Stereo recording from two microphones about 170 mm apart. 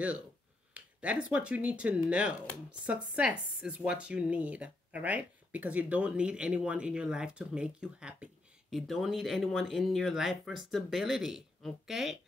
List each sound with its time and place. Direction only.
0.7 s speech: 5° right (ahead or behind)